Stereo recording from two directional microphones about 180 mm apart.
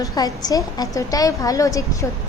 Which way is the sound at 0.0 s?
20° left (ahead or behind).